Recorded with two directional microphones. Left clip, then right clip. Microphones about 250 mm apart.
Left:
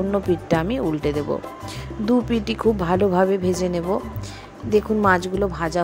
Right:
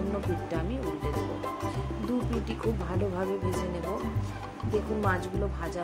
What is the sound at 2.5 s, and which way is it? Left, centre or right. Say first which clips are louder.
Speech: left 13 dB; left.